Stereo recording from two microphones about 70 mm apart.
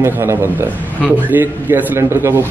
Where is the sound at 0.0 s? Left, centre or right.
Right.